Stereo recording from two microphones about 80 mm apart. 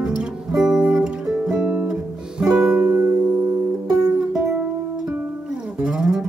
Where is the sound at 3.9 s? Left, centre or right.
Centre.